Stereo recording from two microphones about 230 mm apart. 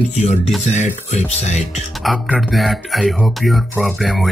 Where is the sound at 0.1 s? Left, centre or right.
Left.